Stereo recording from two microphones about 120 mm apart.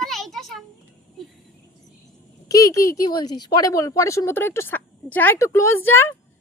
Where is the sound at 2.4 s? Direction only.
30° left (ahead or behind).